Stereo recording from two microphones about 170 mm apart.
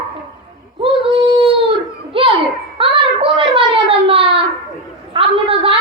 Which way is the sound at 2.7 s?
30° right (ahead or behind).